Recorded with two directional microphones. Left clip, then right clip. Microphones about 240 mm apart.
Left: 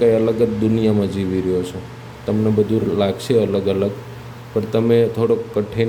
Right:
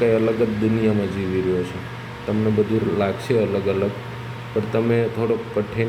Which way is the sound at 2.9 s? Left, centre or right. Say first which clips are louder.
Left 4 dB; centre.